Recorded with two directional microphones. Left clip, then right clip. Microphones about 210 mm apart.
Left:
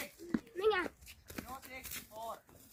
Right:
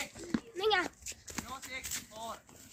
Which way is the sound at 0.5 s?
40° right (ahead or behind).